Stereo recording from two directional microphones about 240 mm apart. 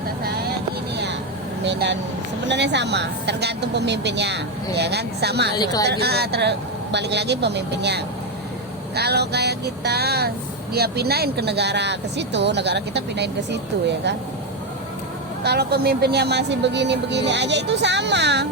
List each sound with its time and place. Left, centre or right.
1.6 s speech: right
5.5 s speech: centre
5.9 s speech: right
15.4 s speech: right